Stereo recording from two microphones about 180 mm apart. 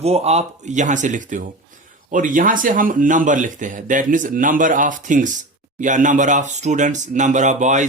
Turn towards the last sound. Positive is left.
turn(degrees=-40)  # may be behind; listen again after turning